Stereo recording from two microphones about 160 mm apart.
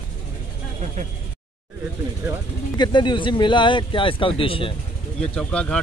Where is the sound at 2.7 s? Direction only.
30° left (ahead or behind).